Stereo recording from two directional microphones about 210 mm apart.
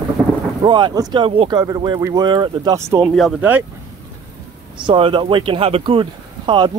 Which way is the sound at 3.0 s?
Centre (ahead or behind).